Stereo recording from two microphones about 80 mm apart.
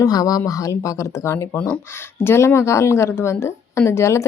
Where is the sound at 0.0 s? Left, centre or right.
Left.